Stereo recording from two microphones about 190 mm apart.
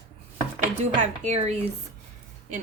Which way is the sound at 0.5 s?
35° right (ahead or behind).